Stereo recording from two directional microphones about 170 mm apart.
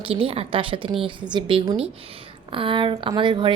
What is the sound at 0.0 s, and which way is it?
A woman's voice, 35° right (ahead or behind).